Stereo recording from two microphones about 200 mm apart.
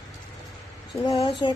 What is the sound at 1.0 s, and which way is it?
Speech, 20° left (ahead or behind).